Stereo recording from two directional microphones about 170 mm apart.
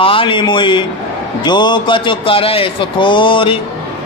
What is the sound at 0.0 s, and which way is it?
A man's voice, 30° left (ahead or behind).